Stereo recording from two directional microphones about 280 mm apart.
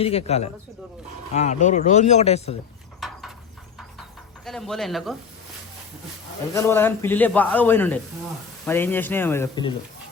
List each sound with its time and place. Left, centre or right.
0.0 s speech: left
3.0 s a sound: centre
4.4 s speech: centre
6.5 s a man's voice: centre